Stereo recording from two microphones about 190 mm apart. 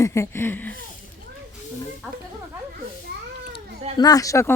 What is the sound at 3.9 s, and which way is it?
Speech, 20° left (ahead or behind).